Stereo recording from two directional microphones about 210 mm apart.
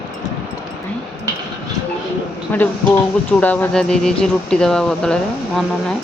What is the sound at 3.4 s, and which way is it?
Speech, 5° left (ahead or behind).